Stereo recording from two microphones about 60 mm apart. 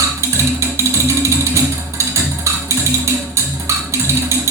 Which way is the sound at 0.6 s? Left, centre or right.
Right.